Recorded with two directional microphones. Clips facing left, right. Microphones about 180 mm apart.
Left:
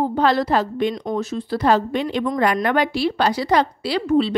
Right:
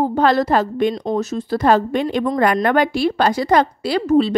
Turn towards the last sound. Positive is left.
turn(degrees=-45)  # may be behind; listen again after turning